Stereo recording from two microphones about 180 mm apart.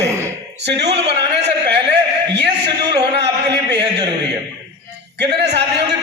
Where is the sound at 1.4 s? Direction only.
70° right (ahead or behind).